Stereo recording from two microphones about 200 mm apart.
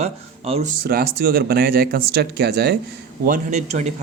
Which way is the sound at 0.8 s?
50° right (ahead or behind).